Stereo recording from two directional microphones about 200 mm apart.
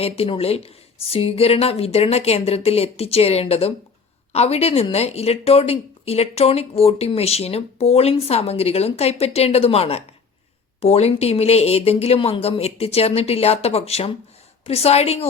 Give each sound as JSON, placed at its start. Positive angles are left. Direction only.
{"t": 0.0, "sound": "a woman's voice", "side_deg": 30}